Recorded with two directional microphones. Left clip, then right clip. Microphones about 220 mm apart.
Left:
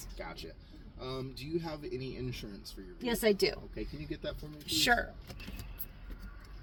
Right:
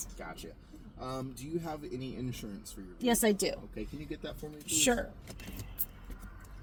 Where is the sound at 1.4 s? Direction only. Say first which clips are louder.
Left 1 dB; 40° right (ahead or behind).